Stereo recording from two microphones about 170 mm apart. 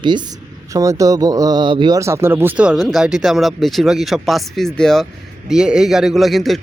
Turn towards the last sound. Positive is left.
turn(degrees=0)  # may be behind; listen again after turning